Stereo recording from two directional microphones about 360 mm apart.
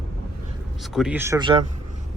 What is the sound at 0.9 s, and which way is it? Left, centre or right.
Speech, centre.